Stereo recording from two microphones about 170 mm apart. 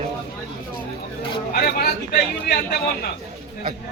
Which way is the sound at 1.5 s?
65° left (ahead or behind).